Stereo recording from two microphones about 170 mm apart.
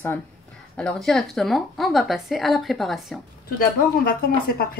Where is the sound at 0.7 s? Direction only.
5° left (ahead or behind).